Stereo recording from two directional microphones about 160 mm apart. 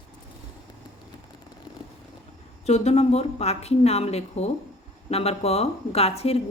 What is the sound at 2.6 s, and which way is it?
A woman's voice, 40° left (ahead or behind).